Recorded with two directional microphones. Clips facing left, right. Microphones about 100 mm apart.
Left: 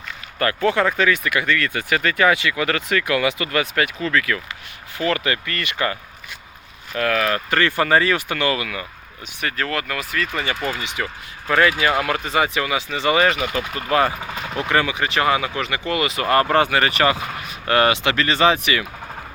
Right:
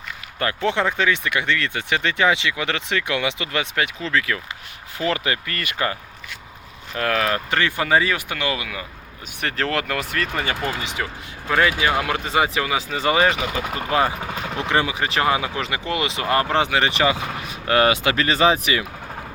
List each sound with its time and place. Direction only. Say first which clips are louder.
0.3 s speech: left 3 dB; 20° right (ahead or behind)
7.5 s speech: left 3 dB; 10° right (ahead or behind)
9.4 s speech: right 1 dB; 55° right (ahead or behind)
10.3 s speech: even; 35° right (ahead or behind)
11.4 s speech: left 2 dB; 10° right (ahead or behind)
12.2 s speech: even; 30° right (ahead or behind)
13.7 s speech: left 2 dB; 20° right (ahead or behind)
14.7 s speech: left 1 dB; 30° right (ahead or behind)
17.8 s speech: even; 30° left (ahead or behind)
18.1 s speech: even; 30° right (ahead or behind)